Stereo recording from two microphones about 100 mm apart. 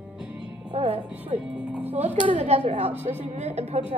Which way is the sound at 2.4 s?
90° right.